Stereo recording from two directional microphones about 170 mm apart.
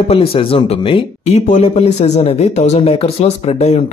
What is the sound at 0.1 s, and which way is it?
Speech, 35° left (ahead or behind).